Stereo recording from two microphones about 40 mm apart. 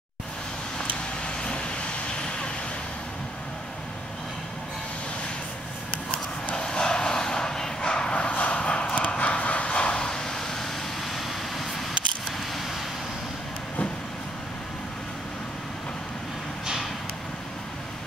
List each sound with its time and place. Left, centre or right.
1.2 s vehicle: left
6.5 s vehicle: centre
8.3 s a sound: left
9.1 s vehicle: left; by 11.8 s centre